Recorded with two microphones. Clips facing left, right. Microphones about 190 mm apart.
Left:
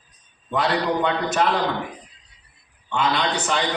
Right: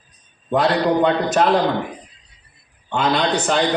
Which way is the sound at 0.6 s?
50° right (ahead or behind).